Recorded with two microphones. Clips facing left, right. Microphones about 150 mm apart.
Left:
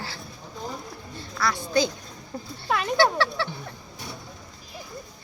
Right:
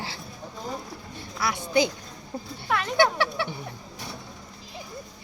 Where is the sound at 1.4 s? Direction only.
15° right (ahead or behind).